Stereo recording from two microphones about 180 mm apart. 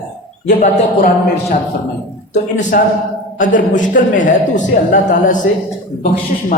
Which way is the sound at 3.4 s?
45° left (ahead or behind).